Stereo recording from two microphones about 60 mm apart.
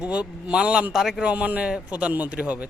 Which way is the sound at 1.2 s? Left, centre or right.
Right.